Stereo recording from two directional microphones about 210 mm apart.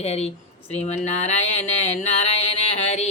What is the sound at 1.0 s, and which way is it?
Mantra, 30° left (ahead or behind).